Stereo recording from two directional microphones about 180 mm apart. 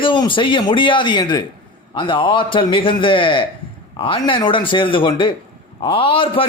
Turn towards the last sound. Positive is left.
turn(degrees=30)  # may be behind; listen again after turning